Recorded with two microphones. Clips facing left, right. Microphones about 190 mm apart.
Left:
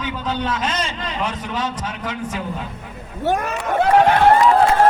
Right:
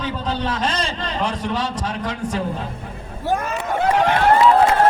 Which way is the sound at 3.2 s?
70° left (ahead or behind).